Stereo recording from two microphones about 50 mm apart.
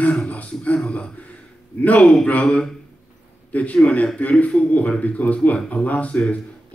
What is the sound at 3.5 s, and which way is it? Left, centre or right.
A man's voice, left.